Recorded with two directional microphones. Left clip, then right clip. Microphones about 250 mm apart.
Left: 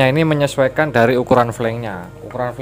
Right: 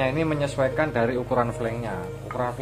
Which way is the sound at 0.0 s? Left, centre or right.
Left.